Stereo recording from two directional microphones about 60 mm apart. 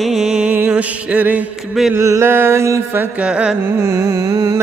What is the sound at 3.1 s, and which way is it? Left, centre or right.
Music, centre.